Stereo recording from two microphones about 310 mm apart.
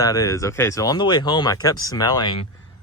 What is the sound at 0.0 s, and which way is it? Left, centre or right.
Speech, centre.